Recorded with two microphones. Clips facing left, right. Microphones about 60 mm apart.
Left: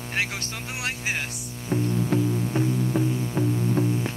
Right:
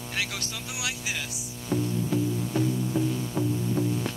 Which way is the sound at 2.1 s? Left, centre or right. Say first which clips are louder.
Left 3 dB; left.